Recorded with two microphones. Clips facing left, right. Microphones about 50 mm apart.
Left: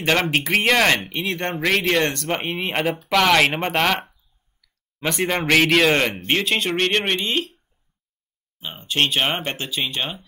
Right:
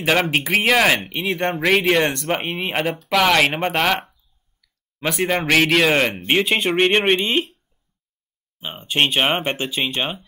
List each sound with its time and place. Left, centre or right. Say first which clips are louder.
0.0 s a man's voice: right 1 dB; centre; by 7.5 s right
8.5 s speech: right 2 dB; right